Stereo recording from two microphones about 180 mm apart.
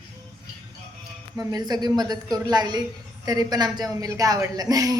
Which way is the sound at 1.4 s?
20° right (ahead or behind).